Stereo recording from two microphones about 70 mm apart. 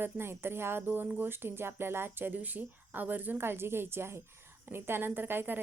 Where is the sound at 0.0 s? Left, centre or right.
Right.